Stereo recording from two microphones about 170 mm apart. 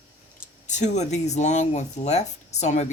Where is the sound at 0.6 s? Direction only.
45° left (ahead or behind).